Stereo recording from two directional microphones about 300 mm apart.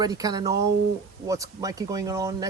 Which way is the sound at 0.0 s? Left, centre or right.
Centre.